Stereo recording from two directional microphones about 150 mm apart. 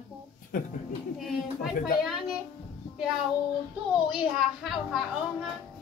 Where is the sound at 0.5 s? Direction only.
60° left (ahead or behind).